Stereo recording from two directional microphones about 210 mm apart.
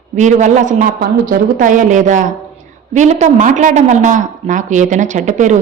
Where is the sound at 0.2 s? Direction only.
35° right (ahead or behind).